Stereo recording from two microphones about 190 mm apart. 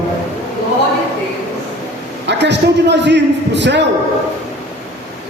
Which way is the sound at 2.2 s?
65° right (ahead or behind).